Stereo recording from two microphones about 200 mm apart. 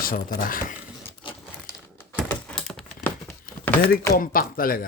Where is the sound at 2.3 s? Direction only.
5° left (ahead or behind).